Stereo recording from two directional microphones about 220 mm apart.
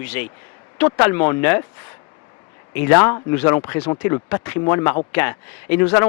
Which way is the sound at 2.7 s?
10° left (ahead or behind).